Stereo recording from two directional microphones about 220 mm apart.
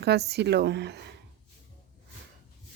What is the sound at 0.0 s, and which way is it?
Speech, 50° right (ahead or behind).